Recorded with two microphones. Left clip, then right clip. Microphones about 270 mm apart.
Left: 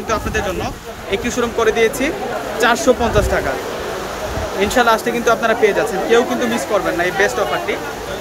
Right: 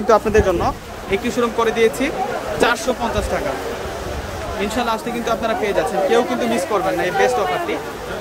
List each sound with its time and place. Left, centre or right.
0.1 s speech: centre
1.1 s speech: centre
4.6 s speech: centre